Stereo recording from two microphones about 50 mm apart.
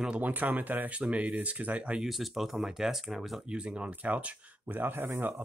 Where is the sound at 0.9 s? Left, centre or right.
Right.